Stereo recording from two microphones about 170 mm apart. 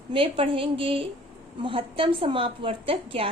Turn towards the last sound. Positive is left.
turn(degrees=-35)  # may be behind; listen again after turning